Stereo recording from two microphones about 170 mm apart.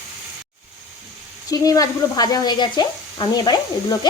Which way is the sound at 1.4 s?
20° left (ahead or behind).